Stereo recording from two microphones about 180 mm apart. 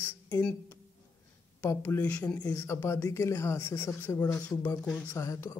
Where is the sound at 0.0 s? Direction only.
10° left (ahead or behind).